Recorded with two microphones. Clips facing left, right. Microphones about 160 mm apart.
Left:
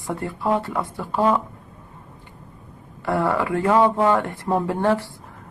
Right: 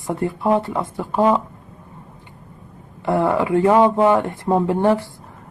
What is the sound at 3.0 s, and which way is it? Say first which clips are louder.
Speech: right 3 dB; 20° right (ahead or behind).